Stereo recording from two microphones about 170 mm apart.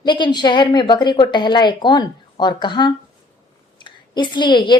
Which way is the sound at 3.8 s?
30° left (ahead or behind).